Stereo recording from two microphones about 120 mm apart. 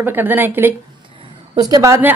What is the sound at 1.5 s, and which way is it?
Speech, 35° right (ahead or behind).